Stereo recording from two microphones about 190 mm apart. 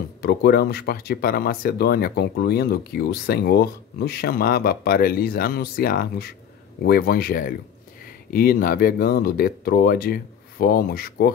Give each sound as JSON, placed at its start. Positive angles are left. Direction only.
{"t": 0.2, "sound": "speech", "side_deg": 55}